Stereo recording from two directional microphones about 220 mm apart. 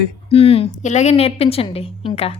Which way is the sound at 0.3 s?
25° left (ahead or behind).